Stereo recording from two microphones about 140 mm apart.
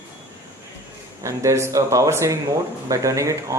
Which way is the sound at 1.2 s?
20° right (ahead or behind).